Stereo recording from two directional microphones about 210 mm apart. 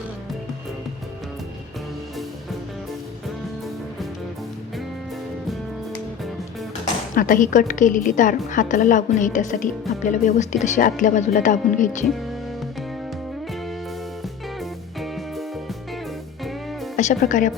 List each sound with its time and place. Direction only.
7.2 s speech: 40° left (ahead or behind)
14.6 s music: centre (ahead or behind)
17.0 s speech: 35° left (ahead or behind)